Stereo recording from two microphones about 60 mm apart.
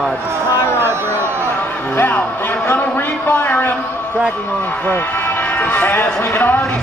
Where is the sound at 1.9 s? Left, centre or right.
Left.